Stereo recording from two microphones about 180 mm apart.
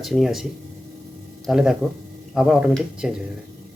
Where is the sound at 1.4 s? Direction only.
Centre (ahead or behind).